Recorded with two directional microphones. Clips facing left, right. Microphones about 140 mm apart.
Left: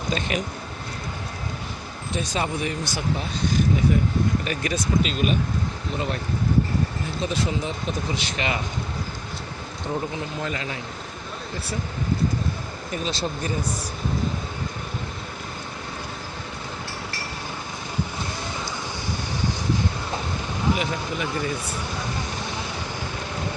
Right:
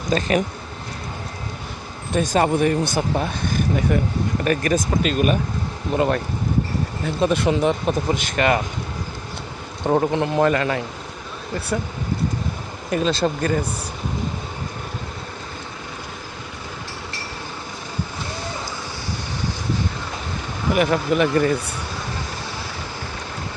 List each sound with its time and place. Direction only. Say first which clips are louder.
0.1 s speech: right 7 dB; 40° right (ahead or behind)
2.1 s speech: right 8 dB; 50° right (ahead or behind)
7.2 s speech: right 8 dB; 60° right (ahead or behind)
9.8 s speech: right 10 dB; 60° right (ahead or behind)
12.9 s speech: right 8 dB; 65° right (ahead or behind)
20.7 s speech: right 9 dB; 70° right (ahead or behind)